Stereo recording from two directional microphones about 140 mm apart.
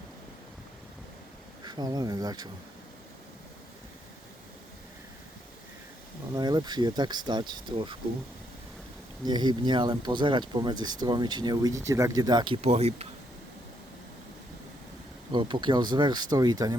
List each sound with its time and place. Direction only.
1.6 s speech: 30° right (ahead or behind)
6.3 s speech: 30° right (ahead or behind)
9.2 s speech: 30° right (ahead or behind)
12.6 s speech: 50° right (ahead or behind)
15.3 s speech: 35° right (ahead or behind)